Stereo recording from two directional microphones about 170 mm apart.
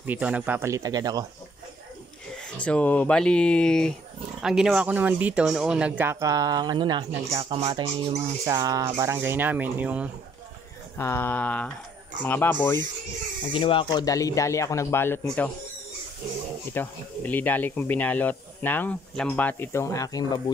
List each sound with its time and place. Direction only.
0.0 s speech: 10° right (ahead or behind)
2.6 s speech: 10° left (ahead or behind); by 8.2 s 35° right (ahead or behind)
8.5 s speech: 20° right (ahead or behind)
11.0 s speech: 15° left (ahead or behind)
13.5 s speech: 30° left (ahead or behind); by 15.5 s 10° left (ahead or behind)
16.7 s speech: 10° left (ahead or behind)